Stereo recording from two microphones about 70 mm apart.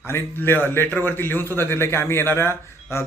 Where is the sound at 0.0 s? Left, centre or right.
Left.